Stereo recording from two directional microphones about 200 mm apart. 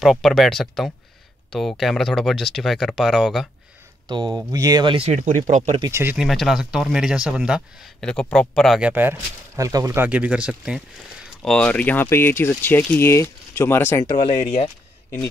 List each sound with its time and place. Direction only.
0.0 s speech: centre (ahead or behind)
4.5 s speech: 20° right (ahead or behind)
5.2 s speech: 40° right (ahead or behind)
5.8 s speech: 15° right (ahead or behind)
6.1 s speech: centre (ahead or behind)
14.4 s speech: 35° left (ahead or behind)